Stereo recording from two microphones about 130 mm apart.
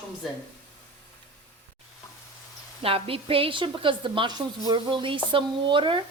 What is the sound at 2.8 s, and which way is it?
A woman's voice, 45° right (ahead or behind).